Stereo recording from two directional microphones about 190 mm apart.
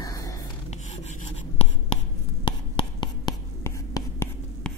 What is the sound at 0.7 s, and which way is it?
Writing, 35° left (ahead or behind).